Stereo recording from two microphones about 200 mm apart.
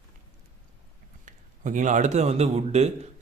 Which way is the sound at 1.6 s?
40° right (ahead or behind).